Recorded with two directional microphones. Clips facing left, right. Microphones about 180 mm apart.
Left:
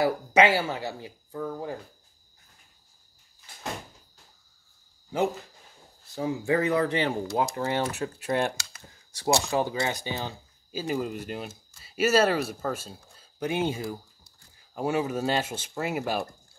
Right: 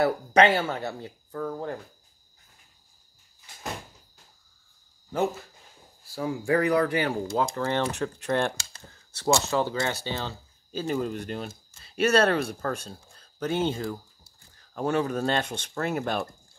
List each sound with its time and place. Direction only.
0.0 s speech: 10° left (ahead or behind)
6.0 s speech: 20° left (ahead or behind)
7.5 s speech: 15° left (ahead or behind)